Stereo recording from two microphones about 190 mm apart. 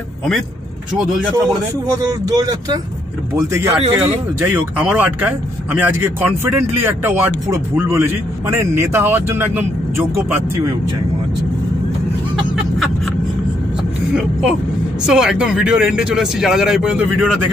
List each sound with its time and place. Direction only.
2.0 s speech: 20° right (ahead or behind)
15.0 s speech: 5° right (ahead or behind)